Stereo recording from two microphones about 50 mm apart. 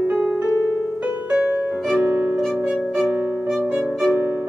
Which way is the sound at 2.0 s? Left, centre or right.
Right.